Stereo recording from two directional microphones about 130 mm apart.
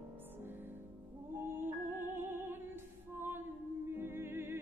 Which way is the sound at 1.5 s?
15° right (ahead or behind).